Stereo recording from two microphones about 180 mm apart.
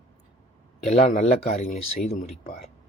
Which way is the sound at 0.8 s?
35° left (ahead or behind).